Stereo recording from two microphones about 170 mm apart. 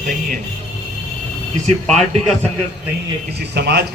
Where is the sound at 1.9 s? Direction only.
Centre (ahead or behind).